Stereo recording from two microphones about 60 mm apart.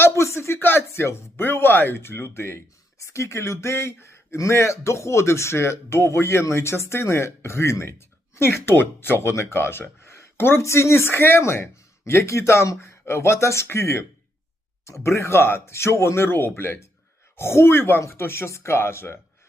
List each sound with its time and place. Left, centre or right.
0.0 s speech: left
3.0 s speech: left
10.6 s speech: left